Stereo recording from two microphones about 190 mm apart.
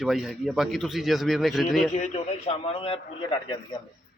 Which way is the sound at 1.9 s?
35° left (ahead or behind).